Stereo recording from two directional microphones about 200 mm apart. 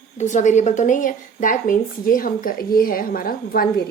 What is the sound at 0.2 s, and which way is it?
A woman's voice, 40° left (ahead or behind).